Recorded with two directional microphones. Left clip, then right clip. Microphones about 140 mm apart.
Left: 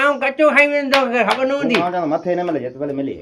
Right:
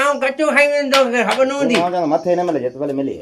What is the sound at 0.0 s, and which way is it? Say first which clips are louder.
Speech: left 1 dB; 40° left (ahead or behind).